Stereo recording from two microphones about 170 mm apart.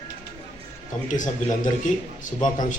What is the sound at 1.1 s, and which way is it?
Speech, 50° left (ahead or behind).